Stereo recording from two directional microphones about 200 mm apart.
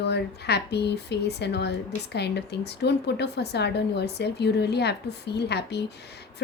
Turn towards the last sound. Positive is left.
turn(degrees=55)  # may be behind; listen again after turning